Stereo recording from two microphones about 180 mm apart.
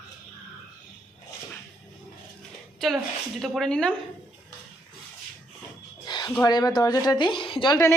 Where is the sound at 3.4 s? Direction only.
Centre (ahead or behind).